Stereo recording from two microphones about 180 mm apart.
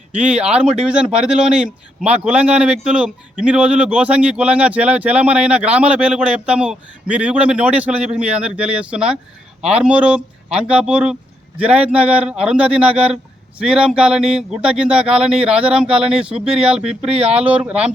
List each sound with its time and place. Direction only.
0.2 s speech: 5° right (ahead or behind)
17.1 s speech: 35° right (ahead or behind)
17.3 s speech: 10° right (ahead or behind)